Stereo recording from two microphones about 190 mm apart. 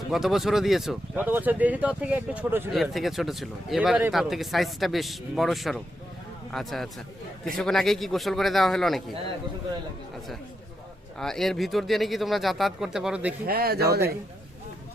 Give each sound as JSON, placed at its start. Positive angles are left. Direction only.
{"t": 0.1, "sound": "speech", "side_deg": 0}
{"t": 11.2, "sound": "speech", "side_deg": 0}
{"t": 13.5, "sound": "speech", "side_deg": -55}